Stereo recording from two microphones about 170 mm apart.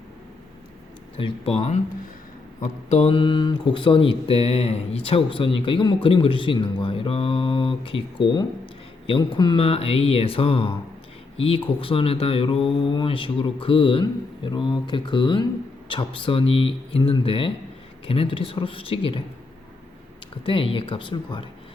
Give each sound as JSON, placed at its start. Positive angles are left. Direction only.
{"t": 1.1, "sound": "speech", "side_deg": 35}
{"t": 20.4, "sound": "speech", "side_deg": 30}